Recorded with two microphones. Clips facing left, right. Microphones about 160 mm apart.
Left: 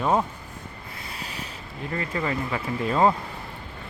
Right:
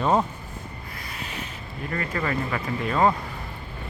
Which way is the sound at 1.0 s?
30° left (ahead or behind).